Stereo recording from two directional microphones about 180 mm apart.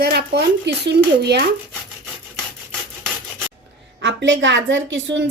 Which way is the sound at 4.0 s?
90° right.